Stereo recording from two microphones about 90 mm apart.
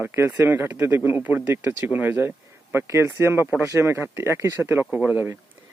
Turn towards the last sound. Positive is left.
turn(degrees=-20)  # may be behind; listen again after turning